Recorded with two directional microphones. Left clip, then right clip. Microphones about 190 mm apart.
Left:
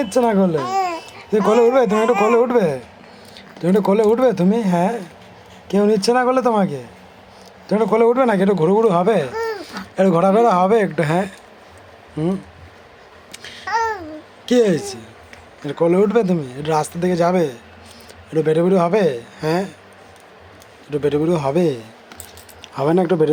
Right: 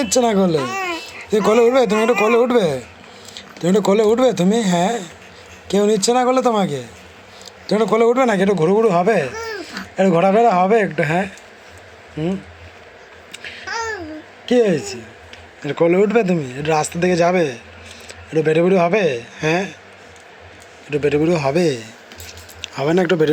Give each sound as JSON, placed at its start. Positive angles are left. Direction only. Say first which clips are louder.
{"t": 0.0, "sound": "speech", "louder": "right 1 dB", "side_deg": -5}
{"t": 0.5, "sound": "a child's voice", "louder": "left 1 dB", "side_deg": 20}
{"t": 1.5, "sound": "speech", "louder": "even", "side_deg": 0}
{"t": 1.9, "sound": "speech", "louder": "even", "side_deg": 20}
{"t": 2.3, "sound": "speech", "louder": "even", "side_deg": 0}
{"t": 9.4, "sound": "speech", "louder": "left 3 dB", "side_deg": 20}
{"t": 13.3, "sound": "babbling", "louder": "left 4 dB", "side_deg": 15}
{"t": 14.4, "sound": "speech", "louder": "even", "side_deg": 20}
{"t": 15.6, "sound": "speech", "louder": "right 1 dB", "side_deg": 0}
{"t": 20.9, "sound": "speech", "louder": "right 1 dB", "side_deg": 10}